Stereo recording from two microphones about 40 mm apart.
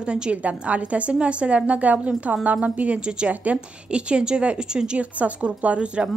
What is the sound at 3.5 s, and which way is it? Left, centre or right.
A woman's voice, right.